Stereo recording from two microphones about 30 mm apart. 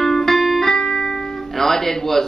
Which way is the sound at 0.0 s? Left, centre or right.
Centre.